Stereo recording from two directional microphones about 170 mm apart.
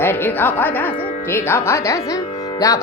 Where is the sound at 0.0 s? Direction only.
10° left (ahead or behind).